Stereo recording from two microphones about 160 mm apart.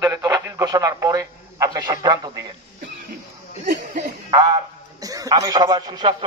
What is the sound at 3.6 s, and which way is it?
Speech, 50° right (ahead or behind).